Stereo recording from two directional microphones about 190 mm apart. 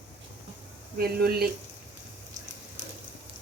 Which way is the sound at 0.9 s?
55° right (ahead or behind).